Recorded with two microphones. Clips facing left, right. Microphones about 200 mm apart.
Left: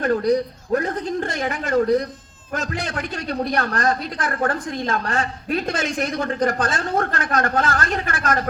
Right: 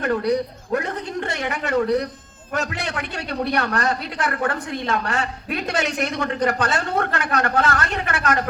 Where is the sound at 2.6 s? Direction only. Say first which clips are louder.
Right 1 dB; 65° right (ahead or behind).